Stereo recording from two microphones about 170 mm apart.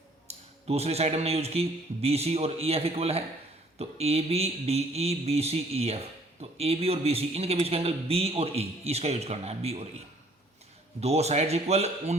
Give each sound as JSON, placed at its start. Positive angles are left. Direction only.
{"t": 0.7, "sound": "a man's voice", "side_deg": -40}
{"t": 11.0, "sound": "a man's voice", "side_deg": -40}